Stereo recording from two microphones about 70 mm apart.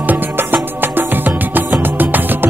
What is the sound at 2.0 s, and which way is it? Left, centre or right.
Music, right.